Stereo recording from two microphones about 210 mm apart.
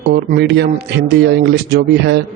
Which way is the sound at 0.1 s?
50° right (ahead or behind).